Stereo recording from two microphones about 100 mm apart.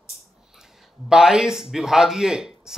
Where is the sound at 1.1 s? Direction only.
5° right (ahead or behind).